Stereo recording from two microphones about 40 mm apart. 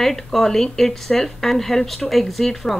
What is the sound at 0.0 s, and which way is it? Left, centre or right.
A woman's voice, centre.